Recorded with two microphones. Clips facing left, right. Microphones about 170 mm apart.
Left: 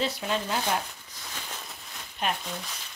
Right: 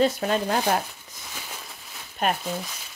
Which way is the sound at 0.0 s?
50° right (ahead or behind).